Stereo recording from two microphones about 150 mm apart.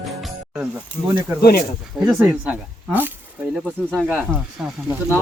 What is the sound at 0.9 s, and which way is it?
Speech, 10° left (ahead or behind).